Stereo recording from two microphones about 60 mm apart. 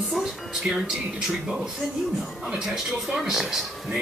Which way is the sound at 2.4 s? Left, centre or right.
Centre.